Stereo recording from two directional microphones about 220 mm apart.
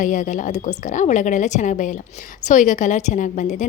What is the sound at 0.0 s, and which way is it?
A woman's voice, 35° left (ahead or behind).